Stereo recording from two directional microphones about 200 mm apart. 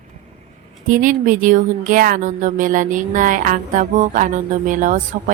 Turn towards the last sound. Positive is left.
turn(degrees=-40)  # may be behind; listen again after turning